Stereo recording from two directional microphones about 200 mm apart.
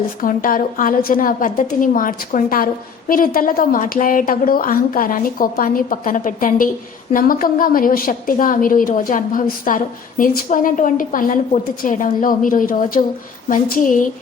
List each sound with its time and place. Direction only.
0.2 s a woman's voice: 45° left (ahead or behind)